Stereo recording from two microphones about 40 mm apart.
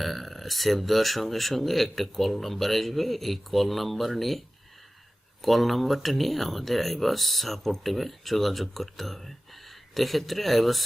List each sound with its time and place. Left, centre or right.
0.0 s speech: centre